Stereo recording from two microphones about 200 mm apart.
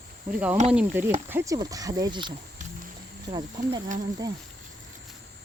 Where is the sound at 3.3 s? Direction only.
20° right (ahead or behind).